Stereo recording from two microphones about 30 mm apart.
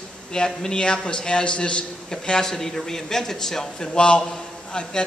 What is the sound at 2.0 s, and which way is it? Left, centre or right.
A man's voice, centre.